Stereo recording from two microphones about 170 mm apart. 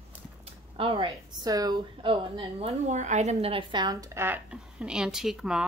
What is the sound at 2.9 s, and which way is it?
Speech, 45° right (ahead or behind).